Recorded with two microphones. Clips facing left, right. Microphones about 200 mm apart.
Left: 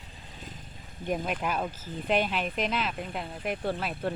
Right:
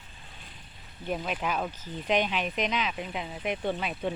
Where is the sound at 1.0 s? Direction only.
15° left (ahead or behind).